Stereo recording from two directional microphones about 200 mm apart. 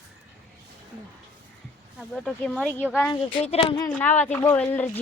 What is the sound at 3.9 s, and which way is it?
Speech, 10° left (ahead or behind).